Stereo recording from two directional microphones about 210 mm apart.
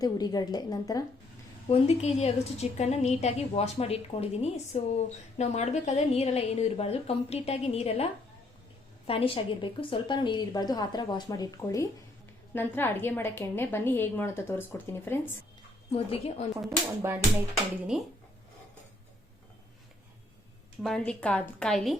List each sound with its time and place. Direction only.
0.0 s a woman's voice: 20° left (ahead or behind)
1.7 s a woman's voice: 30° left (ahead or behind); by 15.3 s 10° left (ahead or behind)
15.9 s a woman's voice: 30° left (ahead or behind)
16.6 s music: 15° right (ahead or behind)
17.9 s a woman's voice: 5° right (ahead or behind)
20.8 s a woman's voice: 5° left (ahead or behind)